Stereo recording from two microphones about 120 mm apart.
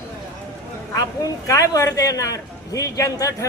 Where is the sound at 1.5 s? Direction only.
30° left (ahead or behind).